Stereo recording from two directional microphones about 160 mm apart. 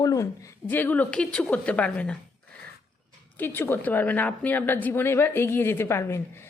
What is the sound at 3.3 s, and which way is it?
A woman's voice, 10° left (ahead or behind).